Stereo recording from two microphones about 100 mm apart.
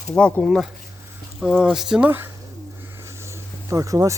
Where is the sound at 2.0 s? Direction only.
20° right (ahead or behind).